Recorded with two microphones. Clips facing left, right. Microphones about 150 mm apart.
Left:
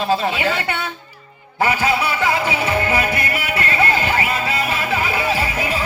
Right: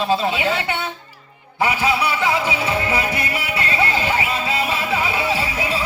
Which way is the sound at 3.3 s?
25° right (ahead or behind).